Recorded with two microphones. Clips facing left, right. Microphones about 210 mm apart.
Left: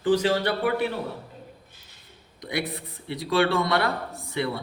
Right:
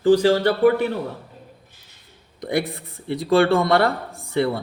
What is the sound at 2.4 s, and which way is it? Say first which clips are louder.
Speech: right 6 dB; 50° right (ahead or behind).